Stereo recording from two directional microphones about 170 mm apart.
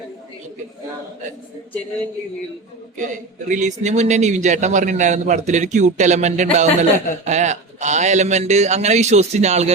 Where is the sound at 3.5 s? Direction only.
45° right (ahead or behind).